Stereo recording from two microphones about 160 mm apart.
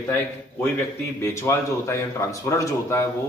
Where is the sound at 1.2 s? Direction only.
15° left (ahead or behind).